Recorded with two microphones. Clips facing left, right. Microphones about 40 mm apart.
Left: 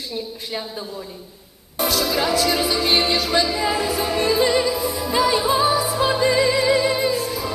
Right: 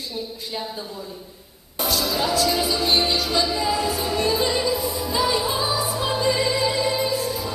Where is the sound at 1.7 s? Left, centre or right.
Left.